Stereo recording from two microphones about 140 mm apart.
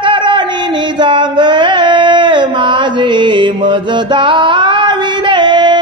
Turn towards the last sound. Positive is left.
turn(degrees=-35)  # may be behind; listen again after turning